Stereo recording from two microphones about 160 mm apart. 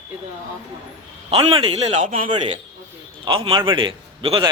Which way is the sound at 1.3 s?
35° right (ahead or behind).